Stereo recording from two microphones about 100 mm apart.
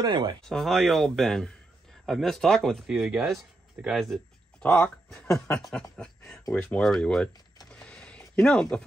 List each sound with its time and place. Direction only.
0.0 s speech: 50° right (ahead or behind)
0.4 s speech: 5° left (ahead or behind)
7.7 s a sound: 10° left (ahead or behind)